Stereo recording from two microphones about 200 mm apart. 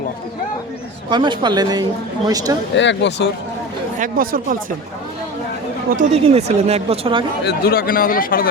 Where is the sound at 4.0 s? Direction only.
45° right (ahead or behind).